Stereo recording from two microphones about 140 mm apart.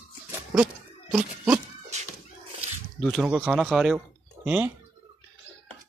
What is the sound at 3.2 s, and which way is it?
Speech, 5° right (ahead or behind).